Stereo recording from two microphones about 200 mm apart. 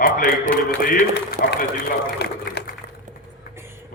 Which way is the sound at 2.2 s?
55° left (ahead or behind).